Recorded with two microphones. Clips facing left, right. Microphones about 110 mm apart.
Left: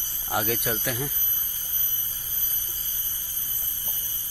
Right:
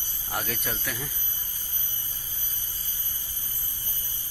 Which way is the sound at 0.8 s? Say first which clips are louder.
Left 5 dB; 15° left (ahead or behind).